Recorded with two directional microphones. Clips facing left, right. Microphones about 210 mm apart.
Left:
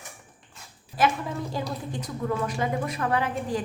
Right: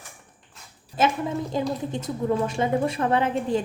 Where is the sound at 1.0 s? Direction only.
25° right (ahead or behind).